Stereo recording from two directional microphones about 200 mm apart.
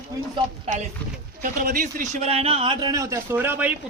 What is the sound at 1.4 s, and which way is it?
A man's voice, 45° right (ahead or behind).